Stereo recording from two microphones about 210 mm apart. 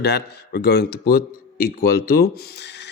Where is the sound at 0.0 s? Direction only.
50° left (ahead or behind).